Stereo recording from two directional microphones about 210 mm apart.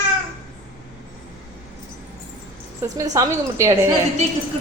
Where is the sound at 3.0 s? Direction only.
15° right (ahead or behind).